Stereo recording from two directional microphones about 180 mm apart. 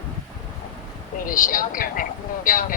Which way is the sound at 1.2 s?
50° left (ahead or behind).